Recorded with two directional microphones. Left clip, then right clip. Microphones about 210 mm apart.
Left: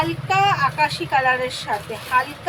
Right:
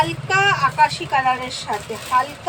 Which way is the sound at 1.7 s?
30° left (ahead or behind).